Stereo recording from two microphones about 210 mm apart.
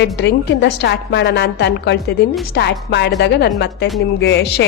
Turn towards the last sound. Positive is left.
turn(degrees=50)  # may be behind; listen again after turning